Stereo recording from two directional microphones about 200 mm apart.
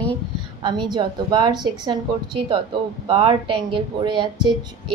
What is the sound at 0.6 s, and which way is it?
A woman's voice, 20° right (ahead or behind).